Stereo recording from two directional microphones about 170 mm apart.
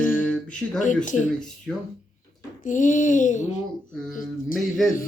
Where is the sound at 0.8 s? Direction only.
45° left (ahead or behind).